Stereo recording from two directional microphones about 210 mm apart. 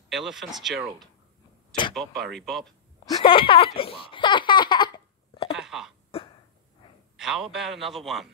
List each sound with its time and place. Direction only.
0.1 s a man's voice: centre (ahead or behind)
3.1 s baby laughter: 25° left (ahead or behind)
5.5 s wail: centre (ahead or behind)
7.2 s a man's voice: centre (ahead or behind)